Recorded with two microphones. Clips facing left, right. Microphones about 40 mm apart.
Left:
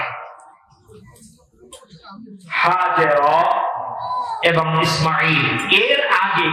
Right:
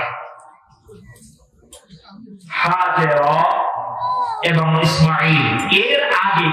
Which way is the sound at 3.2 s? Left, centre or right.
Centre.